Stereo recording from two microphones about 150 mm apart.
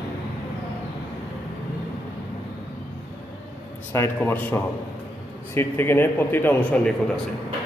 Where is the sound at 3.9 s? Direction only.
15° left (ahead or behind).